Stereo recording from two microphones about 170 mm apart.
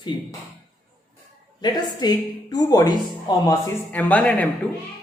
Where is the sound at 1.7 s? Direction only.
25° left (ahead or behind).